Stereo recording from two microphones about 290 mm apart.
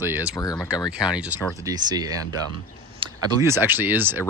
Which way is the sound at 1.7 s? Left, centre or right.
Centre.